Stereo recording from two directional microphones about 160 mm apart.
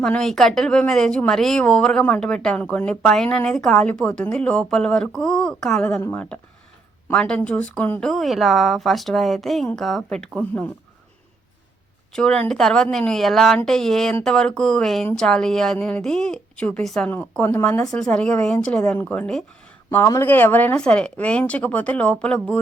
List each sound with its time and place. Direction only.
0.0 s speech: 5° left (ahead or behind)
12.1 s speech: 5° left (ahead or behind)
19.9 s speech: 15° left (ahead or behind)